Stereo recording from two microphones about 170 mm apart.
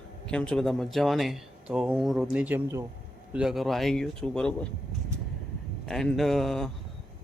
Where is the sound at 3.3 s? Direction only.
5° right (ahead or behind).